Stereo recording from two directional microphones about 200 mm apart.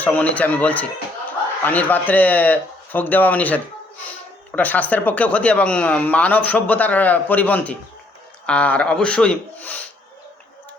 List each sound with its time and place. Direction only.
0.0 s speech: 10° left (ahead or behind)